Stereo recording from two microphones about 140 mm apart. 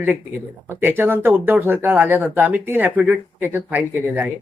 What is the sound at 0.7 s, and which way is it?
Speech, 15° right (ahead or behind).